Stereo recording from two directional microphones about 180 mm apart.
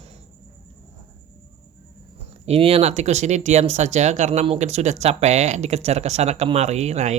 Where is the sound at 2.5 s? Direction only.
35° right (ahead or behind).